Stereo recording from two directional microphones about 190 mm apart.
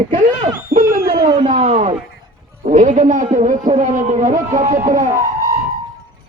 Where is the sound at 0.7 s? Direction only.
50° right (ahead or behind).